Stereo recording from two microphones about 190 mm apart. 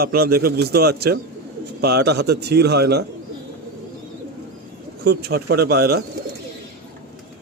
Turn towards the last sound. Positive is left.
turn(degrees=-55)  # may be behind; listen again after turning